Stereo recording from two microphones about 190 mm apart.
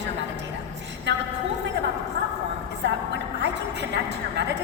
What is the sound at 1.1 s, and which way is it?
Speech, 70° right (ahead or behind).